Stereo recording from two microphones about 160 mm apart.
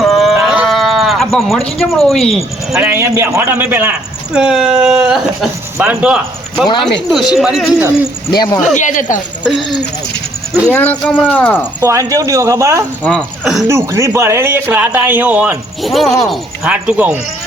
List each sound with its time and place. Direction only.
0.0 s livestock: centre (ahead or behind)
2.0 s speech: centre (ahead or behind)
2.9 s speech: 15° right (ahead or behind)
8.4 s speech: 25° left (ahead or behind)
8.7 s speech: 50° left (ahead or behind)
10.7 s speech: 10° left (ahead or behind)
11.8 s speech: 20° right (ahead or behind)
13.1 s speech: centre (ahead or behind)
13.7 s speech: 20° right (ahead or behind)
15.8 s speech: centre (ahead or behind)